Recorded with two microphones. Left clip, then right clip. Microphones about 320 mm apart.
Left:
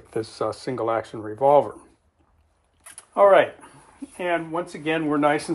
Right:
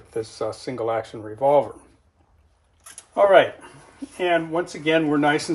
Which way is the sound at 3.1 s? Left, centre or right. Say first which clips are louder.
Even; centre.